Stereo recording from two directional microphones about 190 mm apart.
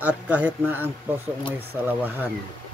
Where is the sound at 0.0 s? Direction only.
10° right (ahead or behind).